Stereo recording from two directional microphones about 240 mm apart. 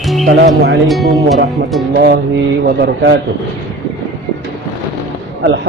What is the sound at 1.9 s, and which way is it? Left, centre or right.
A man's voice, right.